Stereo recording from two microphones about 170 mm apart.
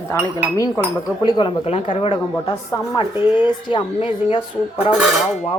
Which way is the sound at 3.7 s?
30° left (ahead or behind).